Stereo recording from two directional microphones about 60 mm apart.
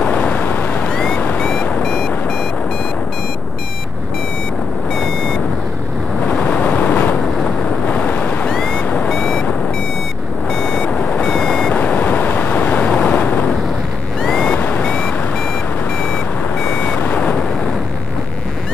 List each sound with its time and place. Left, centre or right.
0.1 s vehicle: left
0.8 s vehicle: centre
6.5 s vehicle: left
7.9 s boat: left
8.5 s vehicle: centre
9.1 s vehicle: centre
10.5 s vehicle: centre
11.7 s vehicle: left
14.2 s vehicle: centre
14.5 s vehicle: left